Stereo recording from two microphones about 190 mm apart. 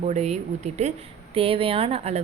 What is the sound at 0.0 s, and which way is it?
Speech, 35° right (ahead or behind).